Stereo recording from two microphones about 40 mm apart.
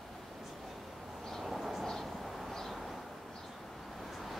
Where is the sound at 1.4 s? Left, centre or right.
Centre.